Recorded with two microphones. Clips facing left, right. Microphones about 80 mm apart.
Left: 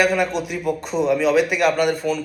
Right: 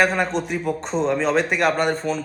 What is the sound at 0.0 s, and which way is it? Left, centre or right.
Speech, right.